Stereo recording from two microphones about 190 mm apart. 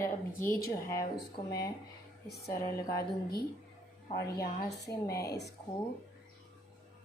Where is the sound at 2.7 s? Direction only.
15° left (ahead or behind).